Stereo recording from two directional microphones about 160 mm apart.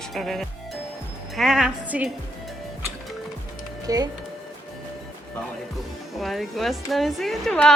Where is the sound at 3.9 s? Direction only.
25° right (ahead or behind).